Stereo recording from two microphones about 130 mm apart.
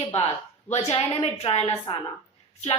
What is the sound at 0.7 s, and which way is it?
A woman's voice, 55° left (ahead or behind).